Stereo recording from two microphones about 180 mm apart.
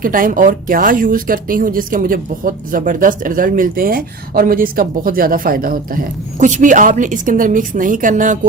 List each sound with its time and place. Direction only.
0.0 s speech: 50° right (ahead or behind)